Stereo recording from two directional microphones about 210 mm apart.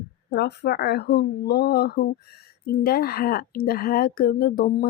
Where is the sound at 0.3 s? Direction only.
50° left (ahead or behind).